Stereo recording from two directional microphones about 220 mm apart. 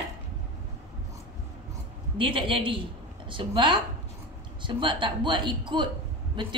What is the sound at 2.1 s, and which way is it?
A woman's voice, 25° right (ahead or behind).